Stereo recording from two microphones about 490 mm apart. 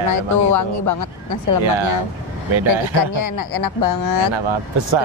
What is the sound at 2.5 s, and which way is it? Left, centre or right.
Speech, right.